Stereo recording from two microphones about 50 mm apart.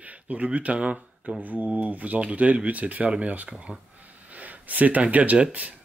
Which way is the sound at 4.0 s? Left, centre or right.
Right.